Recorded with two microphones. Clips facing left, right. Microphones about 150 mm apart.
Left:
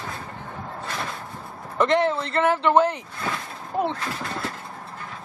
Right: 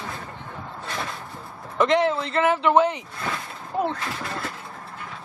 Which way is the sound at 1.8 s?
Centre (ahead or behind).